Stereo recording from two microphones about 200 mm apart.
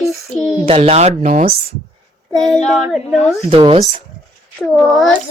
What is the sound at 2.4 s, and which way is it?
Child singing, centre (ahead or behind).